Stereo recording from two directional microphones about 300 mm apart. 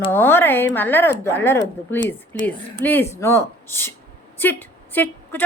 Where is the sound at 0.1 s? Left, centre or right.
Centre.